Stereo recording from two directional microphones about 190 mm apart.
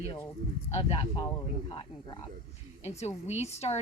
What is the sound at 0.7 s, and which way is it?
Speech, 30° left (ahead or behind).